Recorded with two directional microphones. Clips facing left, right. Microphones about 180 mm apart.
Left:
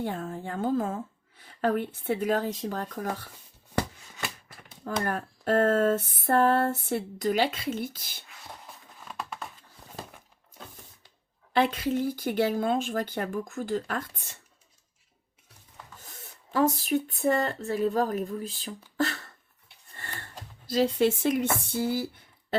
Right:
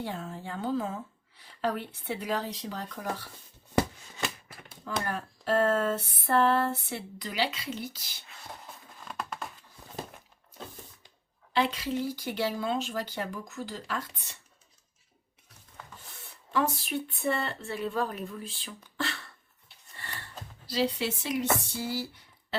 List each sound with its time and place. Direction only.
0.0 s speech: 50° left (ahead or behind)
4.9 s speech: 50° left (ahead or behind)
9.0 s a sound: centre (ahead or behind)
11.5 s speech: 50° left (ahead or behind)
16.0 s speech: 40° left (ahead or behind)
18.9 s a sound: 45° left (ahead or behind)
20.7 s speech: 50° left (ahead or behind)